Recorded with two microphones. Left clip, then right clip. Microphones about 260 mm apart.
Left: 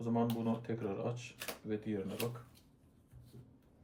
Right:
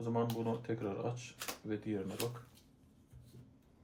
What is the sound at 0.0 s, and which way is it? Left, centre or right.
Speech, centre.